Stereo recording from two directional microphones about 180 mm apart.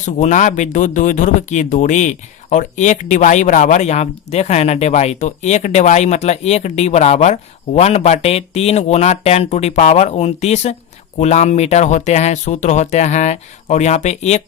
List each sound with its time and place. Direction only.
0.0 s speech: 40° left (ahead or behind)